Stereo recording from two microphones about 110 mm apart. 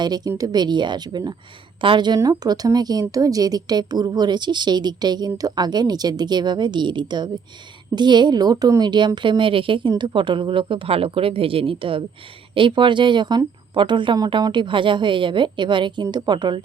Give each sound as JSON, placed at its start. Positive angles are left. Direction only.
{"t": 0.0, "sound": "a woman's voice", "side_deg": -35}